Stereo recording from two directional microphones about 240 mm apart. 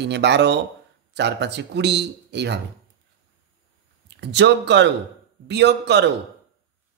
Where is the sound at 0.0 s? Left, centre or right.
Right.